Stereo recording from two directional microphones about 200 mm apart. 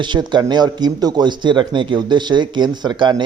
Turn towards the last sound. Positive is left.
turn(degrees=-20)  # may be behind; listen again after turning